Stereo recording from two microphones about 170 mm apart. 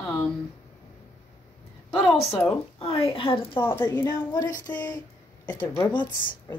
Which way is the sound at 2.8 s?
35° left (ahead or behind).